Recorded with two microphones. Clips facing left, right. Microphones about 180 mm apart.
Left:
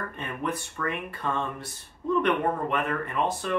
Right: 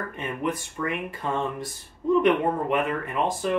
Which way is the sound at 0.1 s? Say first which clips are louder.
Right 3 dB; 15° right (ahead or behind).